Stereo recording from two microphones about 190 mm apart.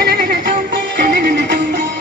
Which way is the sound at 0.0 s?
55° right (ahead or behind).